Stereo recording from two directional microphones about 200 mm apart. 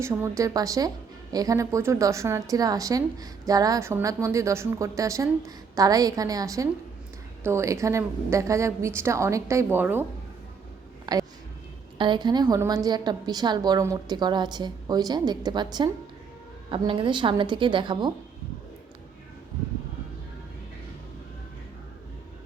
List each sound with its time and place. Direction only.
0.0 s a woman's voice: 15° right (ahead or behind)
11.0 s a sound: 20° right (ahead or behind)
11.9 s a woman's voice: 25° right (ahead or behind)